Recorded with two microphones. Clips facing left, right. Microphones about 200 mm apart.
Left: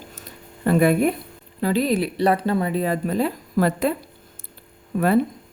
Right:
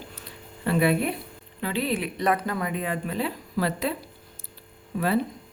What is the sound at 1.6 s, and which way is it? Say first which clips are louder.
A woman's voice: left 7 dB; 40° left (ahead or behind).